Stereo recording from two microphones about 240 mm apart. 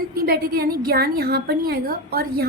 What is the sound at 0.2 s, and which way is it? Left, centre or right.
A woman's voice, right.